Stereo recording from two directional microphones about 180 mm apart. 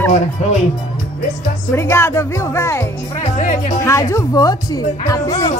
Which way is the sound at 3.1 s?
40° left (ahead or behind).